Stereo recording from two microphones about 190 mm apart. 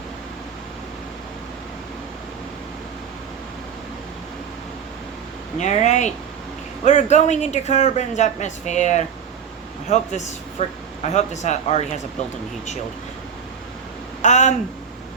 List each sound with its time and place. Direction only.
5.5 s speech: 40° left (ahead or behind)
14.2 s speech: 40° left (ahead or behind)